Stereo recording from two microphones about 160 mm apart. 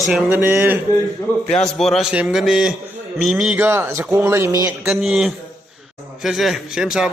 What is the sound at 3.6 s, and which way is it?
A man's voice, 15° right (ahead or behind).